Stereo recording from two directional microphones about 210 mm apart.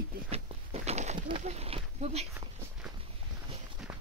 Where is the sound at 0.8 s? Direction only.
35° right (ahead or behind).